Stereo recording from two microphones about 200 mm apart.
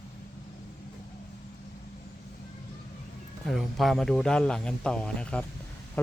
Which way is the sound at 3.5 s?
Centre (ahead or behind).